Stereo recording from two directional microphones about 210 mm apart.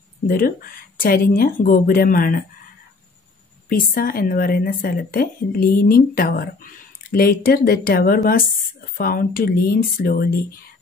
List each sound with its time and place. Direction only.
0.9 s speech: 45° left (ahead or behind)
3.6 s speech: 45° left (ahead or behind)